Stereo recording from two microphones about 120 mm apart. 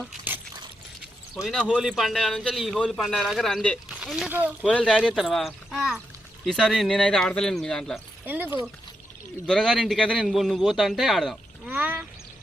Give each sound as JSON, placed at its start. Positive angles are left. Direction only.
{"t": 1.4, "sound": "a man's voice", "side_deg": 0}
{"t": 4.3, "sound": "speech", "side_deg": -15}
{"t": 4.6, "sound": "a man's voice", "side_deg": 10}
{"t": 8.2, "sound": "speech", "side_deg": -15}
{"t": 9.5, "sound": "a man's voice", "side_deg": 5}
{"t": 11.6, "sound": "quack", "side_deg": -15}